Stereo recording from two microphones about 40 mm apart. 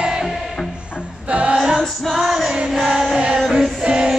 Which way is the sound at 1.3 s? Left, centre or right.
Right.